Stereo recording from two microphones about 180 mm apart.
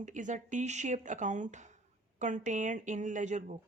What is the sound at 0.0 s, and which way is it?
Speech, 45° right (ahead or behind).